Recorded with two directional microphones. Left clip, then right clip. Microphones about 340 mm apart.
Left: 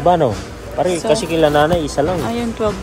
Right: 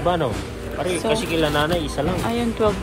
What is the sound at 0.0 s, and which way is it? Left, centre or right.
A man's voice, left.